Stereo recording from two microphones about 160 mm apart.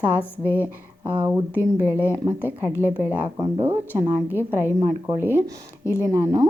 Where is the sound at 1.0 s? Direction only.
15° right (ahead or behind).